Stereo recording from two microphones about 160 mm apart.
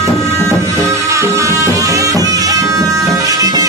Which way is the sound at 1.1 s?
20° right (ahead or behind).